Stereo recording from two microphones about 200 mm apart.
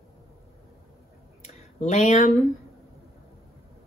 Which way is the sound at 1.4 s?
35° left (ahead or behind).